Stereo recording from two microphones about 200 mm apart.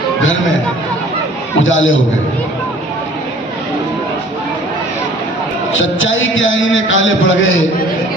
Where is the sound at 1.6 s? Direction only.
70° left (ahead or behind).